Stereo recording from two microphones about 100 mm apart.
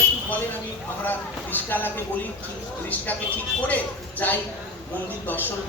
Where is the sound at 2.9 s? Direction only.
15° left (ahead or behind).